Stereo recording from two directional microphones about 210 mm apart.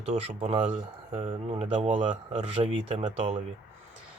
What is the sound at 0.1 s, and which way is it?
Speech, 30° right (ahead or behind).